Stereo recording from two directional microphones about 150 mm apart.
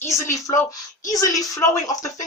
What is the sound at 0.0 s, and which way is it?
Speech, 20° left (ahead or behind).